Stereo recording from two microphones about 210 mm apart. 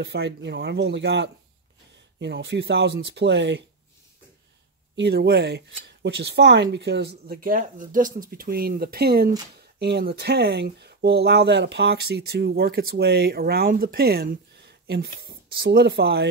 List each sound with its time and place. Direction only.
0.0 s speech: 55° right (ahead or behind)
4.9 s speech: 50° right (ahead or behind)